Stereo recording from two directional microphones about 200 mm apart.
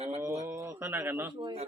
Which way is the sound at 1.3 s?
20° right (ahead or behind).